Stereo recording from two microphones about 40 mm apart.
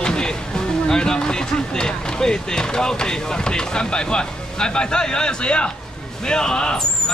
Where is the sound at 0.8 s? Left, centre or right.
Centre.